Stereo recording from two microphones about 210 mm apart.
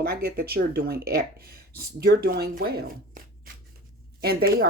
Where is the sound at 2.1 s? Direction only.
50° right (ahead or behind).